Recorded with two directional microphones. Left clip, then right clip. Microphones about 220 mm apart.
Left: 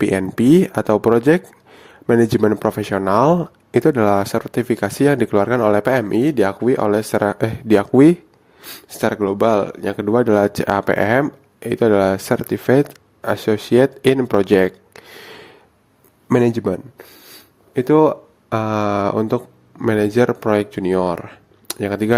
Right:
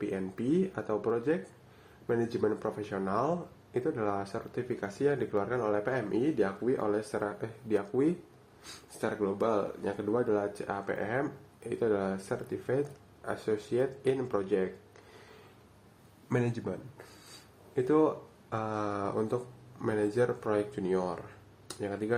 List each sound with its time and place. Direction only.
0.0 s speech: 50° left (ahead or behind)
16.3 s speech: 50° left (ahead or behind)